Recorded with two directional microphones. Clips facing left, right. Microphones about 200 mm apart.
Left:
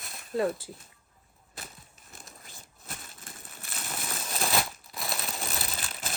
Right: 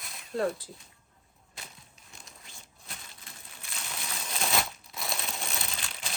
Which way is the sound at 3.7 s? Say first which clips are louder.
Left 3 dB; 50° left (ahead or behind).